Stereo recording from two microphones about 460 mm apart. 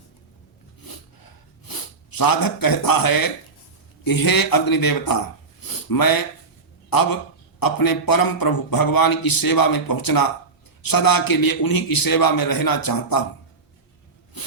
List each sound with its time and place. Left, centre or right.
0.9 s snort: left
4.0 s a man's voice: left
14.4 s a sound: left